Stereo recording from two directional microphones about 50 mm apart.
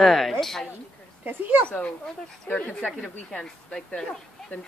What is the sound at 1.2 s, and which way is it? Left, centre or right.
Speech, right.